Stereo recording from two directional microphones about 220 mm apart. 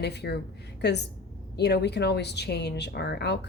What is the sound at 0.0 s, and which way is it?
Speech, 50° left (ahead or behind).